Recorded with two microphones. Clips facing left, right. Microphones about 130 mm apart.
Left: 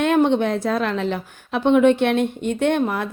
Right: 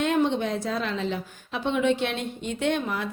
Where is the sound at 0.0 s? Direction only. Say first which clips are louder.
Left 6 dB; 60° left (ahead or behind).